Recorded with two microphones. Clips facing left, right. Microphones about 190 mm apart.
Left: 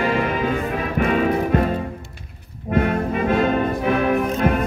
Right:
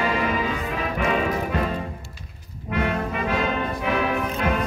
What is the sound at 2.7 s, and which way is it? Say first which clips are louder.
Music: left 5 dB; 50° left (ahead or behind).